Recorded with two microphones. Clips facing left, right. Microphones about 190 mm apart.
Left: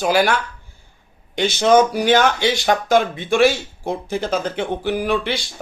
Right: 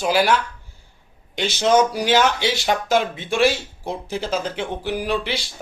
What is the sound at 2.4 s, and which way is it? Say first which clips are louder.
Speech: left 3 dB; 5° right (ahead or behind).